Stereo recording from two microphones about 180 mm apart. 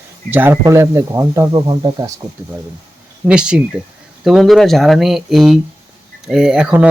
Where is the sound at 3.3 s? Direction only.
5° right (ahead or behind).